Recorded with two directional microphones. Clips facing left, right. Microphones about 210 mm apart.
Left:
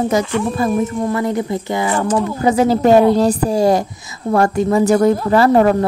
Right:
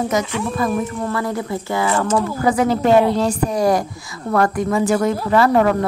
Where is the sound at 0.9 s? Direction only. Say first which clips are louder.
Left 4 dB; 15° left (ahead or behind).